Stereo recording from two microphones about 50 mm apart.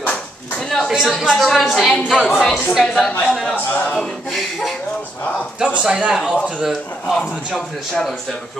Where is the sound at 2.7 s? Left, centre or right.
Centre.